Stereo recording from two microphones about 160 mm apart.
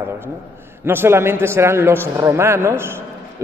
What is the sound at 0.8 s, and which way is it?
A man's voice, 15° right (ahead or behind).